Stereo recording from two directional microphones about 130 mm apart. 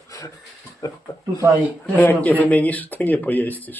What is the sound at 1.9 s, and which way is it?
Speech, 15° left (ahead or behind).